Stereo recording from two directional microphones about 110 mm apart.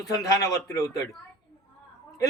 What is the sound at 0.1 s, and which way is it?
Speech, 30° left (ahead or behind).